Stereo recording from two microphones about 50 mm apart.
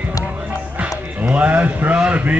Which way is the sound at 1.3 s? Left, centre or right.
Right.